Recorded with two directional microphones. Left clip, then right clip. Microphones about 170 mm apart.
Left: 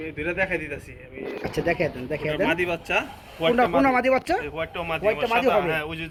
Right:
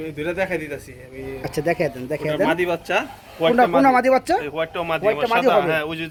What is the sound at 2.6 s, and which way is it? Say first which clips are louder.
A man's voice: right 3 dB; 35° right (ahead or behind).